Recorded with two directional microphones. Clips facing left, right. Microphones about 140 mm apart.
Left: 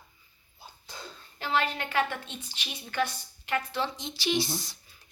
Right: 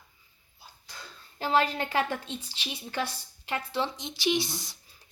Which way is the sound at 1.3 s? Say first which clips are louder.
Right 3 dB; 35° right (ahead or behind).